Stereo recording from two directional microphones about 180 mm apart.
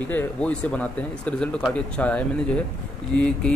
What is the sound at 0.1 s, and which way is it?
Speech, 5° left (ahead or behind).